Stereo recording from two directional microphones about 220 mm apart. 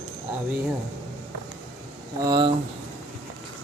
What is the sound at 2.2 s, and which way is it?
Speech, 20° right (ahead or behind).